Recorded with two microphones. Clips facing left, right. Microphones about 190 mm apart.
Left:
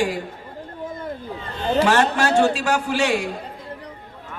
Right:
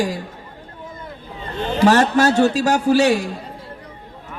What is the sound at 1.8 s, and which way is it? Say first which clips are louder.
A man's voice: right 5 dB; 40° right (ahead or behind).